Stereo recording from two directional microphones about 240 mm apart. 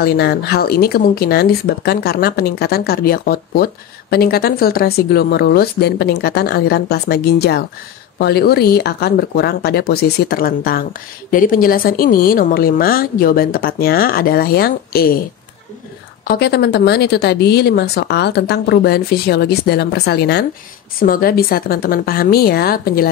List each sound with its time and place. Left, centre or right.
0.0 s speech: left
16.3 s a woman's voice: left